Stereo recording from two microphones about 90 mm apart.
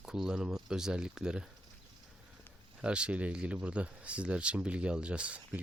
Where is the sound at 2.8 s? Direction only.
10° right (ahead or behind).